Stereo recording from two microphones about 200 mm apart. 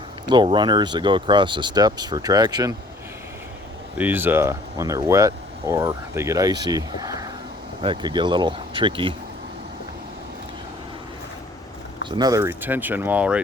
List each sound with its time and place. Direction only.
0.3 s speech: 25° right (ahead or behind)
3.9 s speech: 10° right (ahead or behind); by 9.1 s 25° right (ahead or behind)
12.1 s speech: 20° right (ahead or behind)